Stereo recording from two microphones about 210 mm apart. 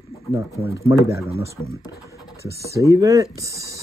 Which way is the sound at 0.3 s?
15° right (ahead or behind).